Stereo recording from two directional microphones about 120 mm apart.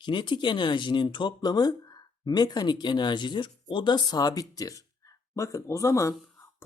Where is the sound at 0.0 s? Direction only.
40° left (ahead or behind).